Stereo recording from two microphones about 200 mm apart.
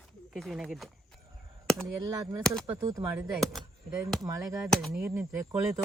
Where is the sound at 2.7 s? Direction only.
15° right (ahead or behind).